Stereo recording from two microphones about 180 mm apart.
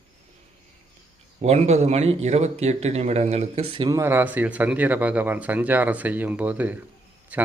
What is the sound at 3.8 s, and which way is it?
Speech, 15° right (ahead or behind).